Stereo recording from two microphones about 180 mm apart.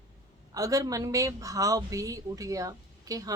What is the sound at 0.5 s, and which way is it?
Speech, 20° right (ahead or behind).